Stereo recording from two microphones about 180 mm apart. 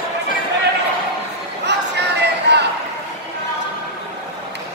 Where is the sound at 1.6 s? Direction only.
70° right (ahead or behind).